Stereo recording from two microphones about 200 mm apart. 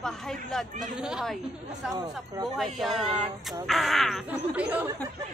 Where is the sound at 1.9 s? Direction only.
20° right (ahead or behind).